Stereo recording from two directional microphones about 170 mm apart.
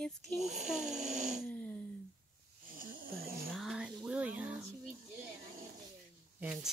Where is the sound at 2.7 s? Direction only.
55° right (ahead or behind).